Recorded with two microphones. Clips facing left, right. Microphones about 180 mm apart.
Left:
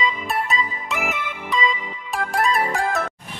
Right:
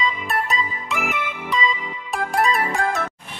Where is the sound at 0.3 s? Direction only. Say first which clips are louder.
Even; centre (ahead or behind).